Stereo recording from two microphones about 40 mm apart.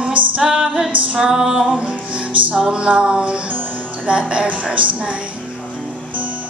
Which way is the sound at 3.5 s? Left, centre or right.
Right.